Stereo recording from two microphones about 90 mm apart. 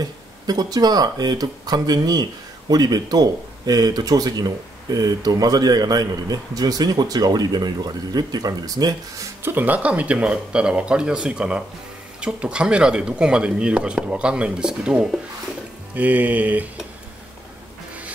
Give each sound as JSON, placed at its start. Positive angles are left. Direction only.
{"t": 0.0, "sound": "a man's voice", "side_deg": -45}
{"t": 9.4, "sound": "speech", "side_deg": -25}